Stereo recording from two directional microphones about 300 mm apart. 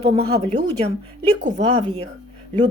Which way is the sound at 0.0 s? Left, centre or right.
Right.